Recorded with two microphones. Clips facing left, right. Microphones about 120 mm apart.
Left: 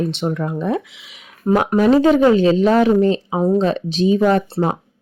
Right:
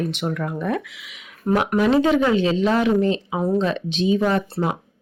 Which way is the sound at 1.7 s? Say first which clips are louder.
Left 5 dB; 40° left (ahead or behind).